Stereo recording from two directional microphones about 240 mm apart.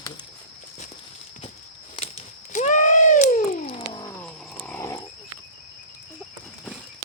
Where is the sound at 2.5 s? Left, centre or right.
Left.